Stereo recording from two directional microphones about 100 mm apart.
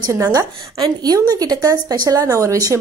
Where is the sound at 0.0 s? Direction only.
35° right (ahead or behind).